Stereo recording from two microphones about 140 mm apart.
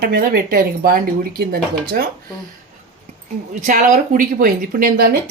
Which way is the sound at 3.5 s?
65° right (ahead or behind).